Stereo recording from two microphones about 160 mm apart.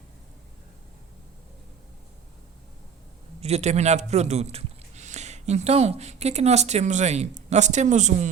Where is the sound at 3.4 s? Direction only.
40° right (ahead or behind).